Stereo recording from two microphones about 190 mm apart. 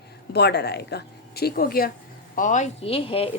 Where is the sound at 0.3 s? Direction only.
60° left (ahead or behind).